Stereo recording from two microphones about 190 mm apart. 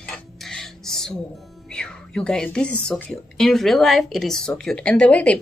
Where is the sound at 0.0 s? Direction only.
5° left (ahead or behind).